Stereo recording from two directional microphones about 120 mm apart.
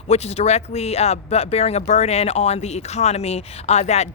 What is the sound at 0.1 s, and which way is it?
Speech, 60° left (ahead or behind).